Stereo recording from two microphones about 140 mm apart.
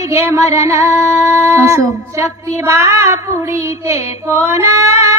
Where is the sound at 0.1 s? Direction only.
20° right (ahead or behind).